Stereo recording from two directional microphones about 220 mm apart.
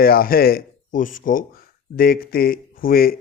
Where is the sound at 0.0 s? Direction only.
40° left (ahead or behind).